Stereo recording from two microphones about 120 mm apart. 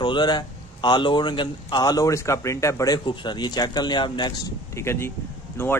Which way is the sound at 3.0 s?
40° left (ahead or behind).